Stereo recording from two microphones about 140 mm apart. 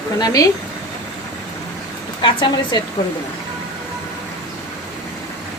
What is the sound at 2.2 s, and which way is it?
Speech, 35° left (ahead or behind).